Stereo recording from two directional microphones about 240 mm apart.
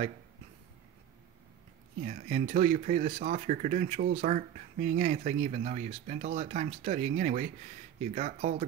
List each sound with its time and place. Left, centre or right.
2.0 s speech: right